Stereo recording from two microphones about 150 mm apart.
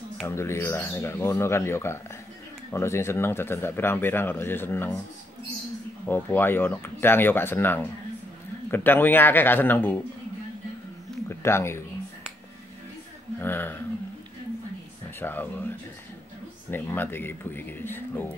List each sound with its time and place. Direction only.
0.3 s speech: 15° left (ahead or behind)
6.0 s speech: 15° left (ahead or behind)
11.2 s speech: 15° left (ahead or behind)
13.4 s speech: 15° left (ahead or behind)
15.1 s speech: 15° left (ahead or behind)
16.7 s speech: 15° left (ahead or behind)